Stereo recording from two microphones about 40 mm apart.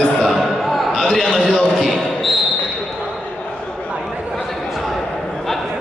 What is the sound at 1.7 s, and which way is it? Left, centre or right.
Basketball bounce, centre.